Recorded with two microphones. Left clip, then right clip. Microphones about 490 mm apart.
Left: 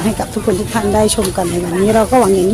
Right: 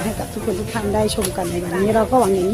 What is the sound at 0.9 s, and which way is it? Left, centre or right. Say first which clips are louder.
Speech: left 6 dB; right.